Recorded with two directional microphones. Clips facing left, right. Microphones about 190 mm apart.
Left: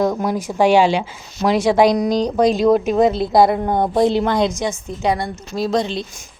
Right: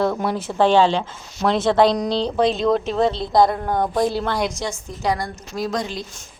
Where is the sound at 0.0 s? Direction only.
10° left (ahead or behind).